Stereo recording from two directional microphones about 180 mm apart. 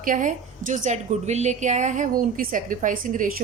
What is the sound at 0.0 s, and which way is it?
A woman's voice, 45° right (ahead or behind).